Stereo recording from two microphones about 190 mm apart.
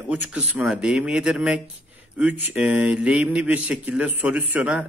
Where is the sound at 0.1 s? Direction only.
10° right (ahead or behind).